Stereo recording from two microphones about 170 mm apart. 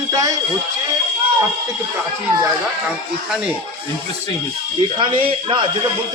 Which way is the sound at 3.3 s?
5° right (ahead or behind).